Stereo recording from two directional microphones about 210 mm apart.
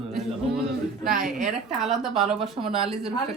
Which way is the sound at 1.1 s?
40° right (ahead or behind).